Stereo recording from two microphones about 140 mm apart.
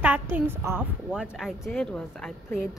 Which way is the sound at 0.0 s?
10° right (ahead or behind).